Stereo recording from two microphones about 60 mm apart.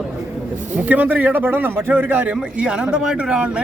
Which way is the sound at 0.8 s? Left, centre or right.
Right.